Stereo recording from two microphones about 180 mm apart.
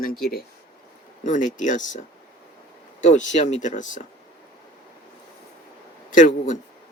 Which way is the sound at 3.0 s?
40° left (ahead or behind).